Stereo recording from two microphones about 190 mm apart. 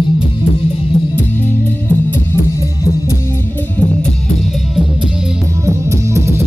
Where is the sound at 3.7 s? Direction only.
5° left (ahead or behind).